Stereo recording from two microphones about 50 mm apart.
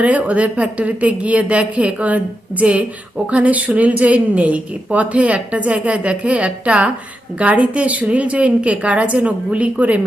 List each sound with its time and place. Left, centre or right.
0.0 s speech: right